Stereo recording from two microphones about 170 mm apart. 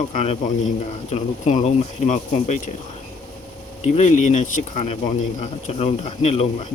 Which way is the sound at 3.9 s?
45° left (ahead or behind).